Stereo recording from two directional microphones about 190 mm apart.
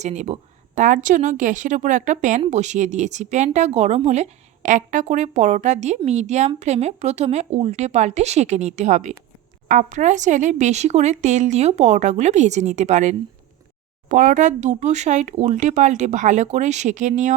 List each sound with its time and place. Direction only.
0.0 s a woman's voice: 35° right (ahead or behind)